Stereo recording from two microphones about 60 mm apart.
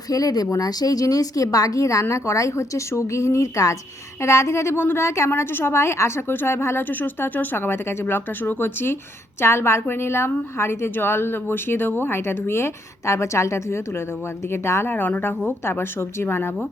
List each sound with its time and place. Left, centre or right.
0.1 s a woman's voice: left
5.3 s speech: left
9.4 s speech: left
15.7 s speech: left